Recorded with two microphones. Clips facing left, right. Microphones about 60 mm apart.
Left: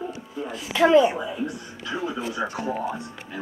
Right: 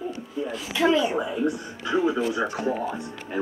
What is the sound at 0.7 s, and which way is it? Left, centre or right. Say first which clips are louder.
Speech: left 5 dB; left.